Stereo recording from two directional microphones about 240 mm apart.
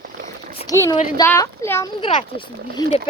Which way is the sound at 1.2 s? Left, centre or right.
Centre.